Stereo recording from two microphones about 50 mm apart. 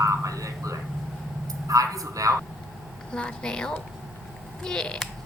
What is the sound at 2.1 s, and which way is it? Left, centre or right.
Speech, right.